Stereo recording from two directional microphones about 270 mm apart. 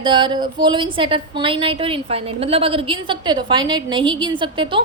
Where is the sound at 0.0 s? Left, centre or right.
Centre.